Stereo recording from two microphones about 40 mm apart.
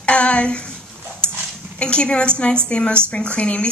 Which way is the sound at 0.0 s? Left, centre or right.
Left.